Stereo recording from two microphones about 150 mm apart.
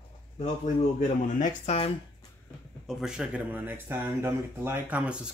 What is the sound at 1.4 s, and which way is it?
Speech, 45° left (ahead or behind).